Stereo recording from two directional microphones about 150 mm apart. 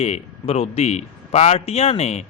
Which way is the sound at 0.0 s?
45° left (ahead or behind).